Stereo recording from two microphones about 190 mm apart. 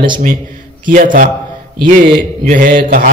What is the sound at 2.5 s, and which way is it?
Speech, 45° right (ahead or behind).